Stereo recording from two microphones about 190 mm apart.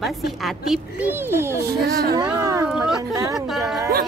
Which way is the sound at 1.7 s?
55° right (ahead or behind).